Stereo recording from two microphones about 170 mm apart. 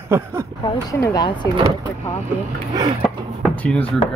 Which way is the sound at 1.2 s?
25° left (ahead or behind).